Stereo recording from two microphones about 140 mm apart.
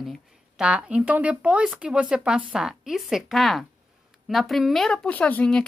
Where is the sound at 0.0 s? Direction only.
5° right (ahead or behind).